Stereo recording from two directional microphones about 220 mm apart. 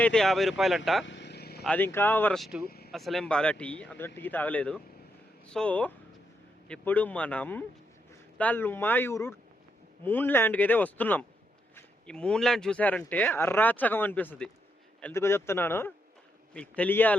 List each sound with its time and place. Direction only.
0.0 s speech: centre (ahead or behind)
1.0 s vehicle: 55° left (ahead or behind)
1.6 s speech: 10° left (ahead or behind)
2.6 s a sound: 45° left (ahead or behind)
2.9 s speech: centre (ahead or behind)